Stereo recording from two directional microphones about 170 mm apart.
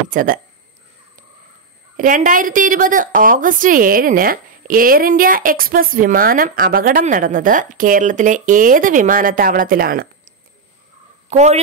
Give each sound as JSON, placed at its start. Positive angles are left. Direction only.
{"t": 0.1, "sound": "a woman's voice", "side_deg": -55}
{"t": 2.0, "sound": "a woman's voice", "side_deg": -50}
{"t": 11.2, "sound": "a woman's voice", "side_deg": -40}